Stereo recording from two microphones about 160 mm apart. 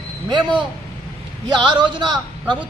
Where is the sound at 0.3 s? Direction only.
30° right (ahead or behind).